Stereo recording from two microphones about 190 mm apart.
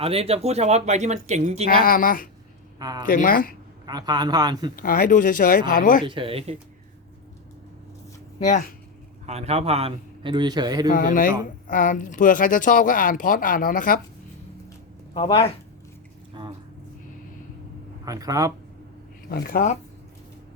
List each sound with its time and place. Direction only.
0.0 s a man's voice: 30° right (ahead or behind)
1.6 s speech: 50° left (ahead or behind)
2.7 s speech: 20° right (ahead or behind)
3.1 s speech: 45° left (ahead or behind)
3.8 s a man's voice: 20° right (ahead or behind)
4.8 s speech: 45° left (ahead or behind)
6.1 s a man's voice: 25° right (ahead or behind)
8.4 s speech: 40° left (ahead or behind)
9.2 s a man's voice: 35° right (ahead or behind)
10.9 s speech: 45° left (ahead or behind)
15.1 s speech: 25° left (ahead or behind)
18.0 s a man's voice: 20° right (ahead or behind)
19.3 s speech: 50° left (ahead or behind)